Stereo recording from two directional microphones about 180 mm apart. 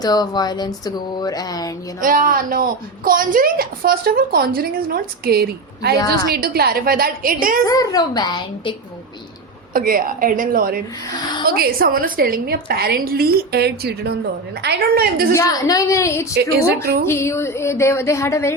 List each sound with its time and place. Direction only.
0.0 s speech: 20° left (ahead or behind)
2.0 s speech: 50° right (ahead or behind)
7.6 s speech: 20° left (ahead or behind)
9.7 s speech: 50° right (ahead or behind)
15.3 s speech: 20° left (ahead or behind)
16.3 s speech: 60° right (ahead or behind)
17.1 s speech: 15° left (ahead or behind)